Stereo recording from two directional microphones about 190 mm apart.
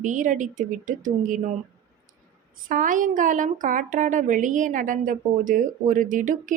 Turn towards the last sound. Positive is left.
turn(degrees=-45)  # may be behind; listen again after turning